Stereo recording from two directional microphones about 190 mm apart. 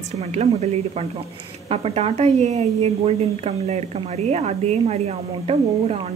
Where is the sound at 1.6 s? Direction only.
35° right (ahead or behind).